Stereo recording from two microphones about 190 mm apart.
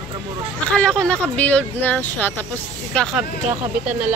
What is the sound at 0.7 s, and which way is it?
Speech, 5° left (ahead or behind).